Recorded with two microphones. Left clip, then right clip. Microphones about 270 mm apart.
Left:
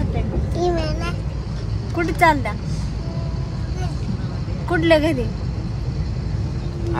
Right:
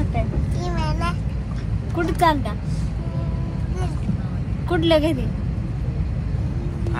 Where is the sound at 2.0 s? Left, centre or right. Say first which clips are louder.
Left 3 dB; left.